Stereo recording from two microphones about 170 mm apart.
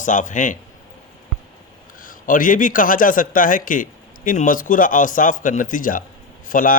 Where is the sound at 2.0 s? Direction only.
55° left (ahead or behind).